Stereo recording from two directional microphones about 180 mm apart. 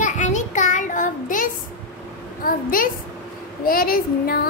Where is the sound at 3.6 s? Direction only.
55° left (ahead or behind).